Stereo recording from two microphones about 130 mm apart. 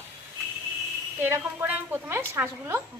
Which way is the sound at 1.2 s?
15° right (ahead or behind).